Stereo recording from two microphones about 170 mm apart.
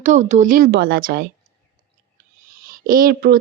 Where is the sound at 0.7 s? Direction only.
70° right (ahead or behind).